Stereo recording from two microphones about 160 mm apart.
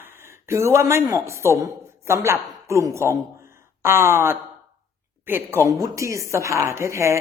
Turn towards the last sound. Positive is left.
turn(degrees=-15)  # may be behind; listen again after turning